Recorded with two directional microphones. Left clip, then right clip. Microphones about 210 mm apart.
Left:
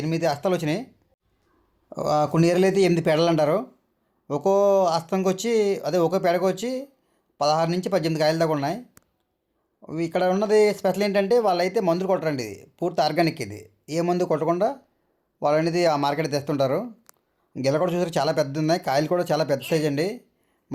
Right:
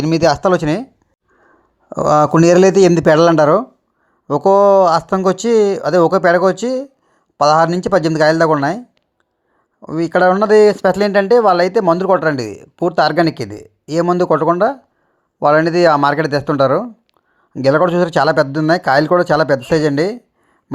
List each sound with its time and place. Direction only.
0.0 s speech: 35° right (ahead or behind)
1.9 s speech: 30° right (ahead or behind)
9.8 s speech: 25° right (ahead or behind)